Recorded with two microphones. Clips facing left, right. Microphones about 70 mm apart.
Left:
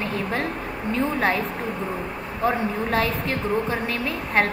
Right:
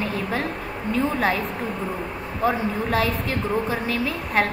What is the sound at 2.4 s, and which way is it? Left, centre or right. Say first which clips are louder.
A woman's voice: even; centre.